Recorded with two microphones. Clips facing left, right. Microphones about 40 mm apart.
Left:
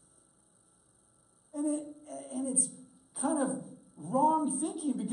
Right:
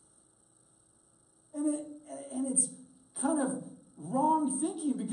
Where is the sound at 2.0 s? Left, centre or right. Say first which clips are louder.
Right 3 dB; right.